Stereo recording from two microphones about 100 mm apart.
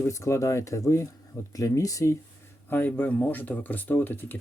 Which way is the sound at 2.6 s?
20° left (ahead or behind).